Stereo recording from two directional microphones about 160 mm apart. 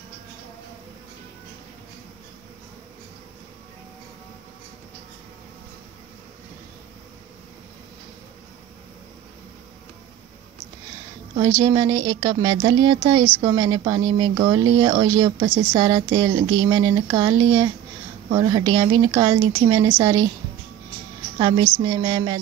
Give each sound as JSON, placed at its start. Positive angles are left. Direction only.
{"t": 11.3, "sound": "speech", "side_deg": -20}
{"t": 21.4, "sound": "a woman's voice", "side_deg": -25}